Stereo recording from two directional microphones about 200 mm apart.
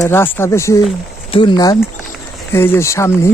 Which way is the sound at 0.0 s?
10° left (ahead or behind).